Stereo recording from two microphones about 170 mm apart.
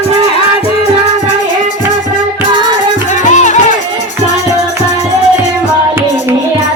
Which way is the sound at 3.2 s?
45° left (ahead or behind).